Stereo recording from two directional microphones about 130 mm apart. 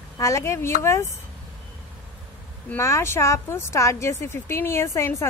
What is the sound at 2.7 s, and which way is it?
Speech, 20° left (ahead or behind).